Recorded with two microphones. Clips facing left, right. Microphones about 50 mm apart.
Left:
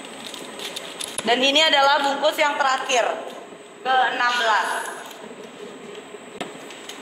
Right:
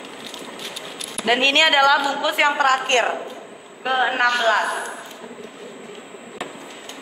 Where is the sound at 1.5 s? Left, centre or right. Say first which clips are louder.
Right 2 dB; right.